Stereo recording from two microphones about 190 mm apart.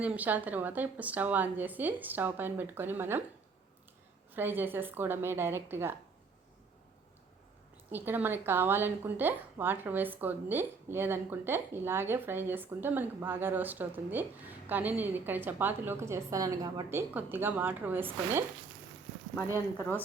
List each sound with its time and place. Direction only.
0.0 s speech: 10° right (ahead or behind)
4.4 s speech: 10° right (ahead or behind)
7.9 s speech: 10° right (ahead or behind)